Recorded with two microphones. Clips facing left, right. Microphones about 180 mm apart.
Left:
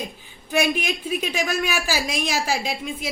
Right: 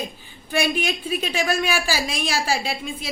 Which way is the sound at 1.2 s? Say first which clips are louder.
Right 3 dB; 5° left (ahead or behind).